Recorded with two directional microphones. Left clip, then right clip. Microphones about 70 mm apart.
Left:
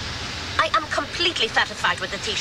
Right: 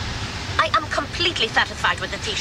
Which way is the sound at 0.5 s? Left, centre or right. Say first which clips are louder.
Right 1 dB; right.